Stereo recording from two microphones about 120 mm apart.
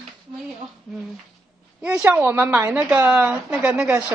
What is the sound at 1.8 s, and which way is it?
A woman's voice, 10° right (ahead or behind).